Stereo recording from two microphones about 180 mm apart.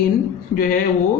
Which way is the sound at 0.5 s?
55° left (ahead or behind).